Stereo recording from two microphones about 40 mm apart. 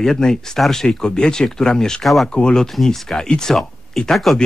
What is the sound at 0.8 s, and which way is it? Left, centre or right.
Speech, left.